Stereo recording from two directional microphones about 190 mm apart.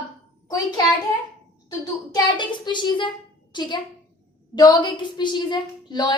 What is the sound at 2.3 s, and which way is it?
A woman's voice, 25° left (ahead or behind).